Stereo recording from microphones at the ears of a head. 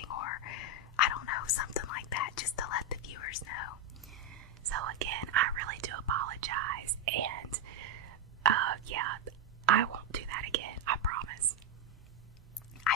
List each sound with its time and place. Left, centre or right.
0.0 s whispering: left
4.3 s whispering: right